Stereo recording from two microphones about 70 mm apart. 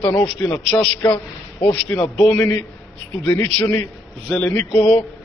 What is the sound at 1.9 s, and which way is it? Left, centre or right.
Speech, centre.